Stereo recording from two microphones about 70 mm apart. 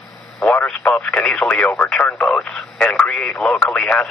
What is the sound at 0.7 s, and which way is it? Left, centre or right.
Speech, centre.